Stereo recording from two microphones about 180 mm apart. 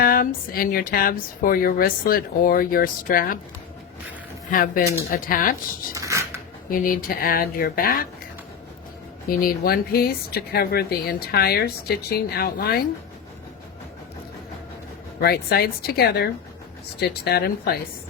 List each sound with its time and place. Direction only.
0.0 s speech: 55° left (ahead or behind)
4.5 s speech: 50° left (ahead or behind)
5.9 s a sound: 15° right (ahead or behind)
6.7 s speech: 50° left (ahead or behind)
9.3 s speech: 55° left (ahead or behind)
15.2 s speech: 60° left (ahead or behind)